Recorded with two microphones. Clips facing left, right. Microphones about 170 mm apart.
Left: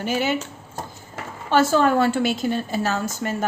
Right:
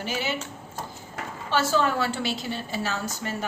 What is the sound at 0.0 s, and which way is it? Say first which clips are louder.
A woman's voice: left 7 dB; 50° left (ahead or behind).